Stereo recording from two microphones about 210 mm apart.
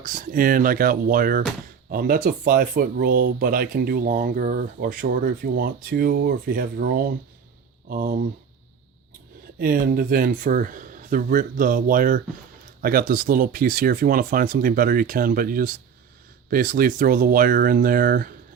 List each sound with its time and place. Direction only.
0.0 s speech: 40° right (ahead or behind)
9.6 s speech: 45° right (ahead or behind)